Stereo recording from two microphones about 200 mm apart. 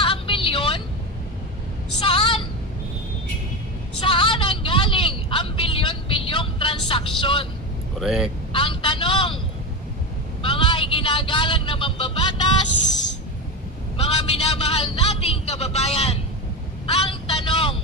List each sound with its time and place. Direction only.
0.0 s vehicle: 25° left (ahead or behind)
2.0 s vehicle: 25° left (ahead or behind)
4.0 s vehicle: 25° left (ahead or behind)
7.9 s speech: centre (ahead or behind)
8.5 s vehicle: 25° left (ahead or behind)
10.4 s vehicle: 25° left (ahead or behind)
13.9 s a sound: 30° left (ahead or behind)
16.8 s vehicle: 30° left (ahead or behind)